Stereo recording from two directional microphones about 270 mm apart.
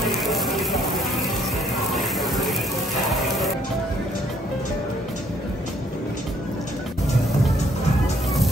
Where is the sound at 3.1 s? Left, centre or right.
Centre.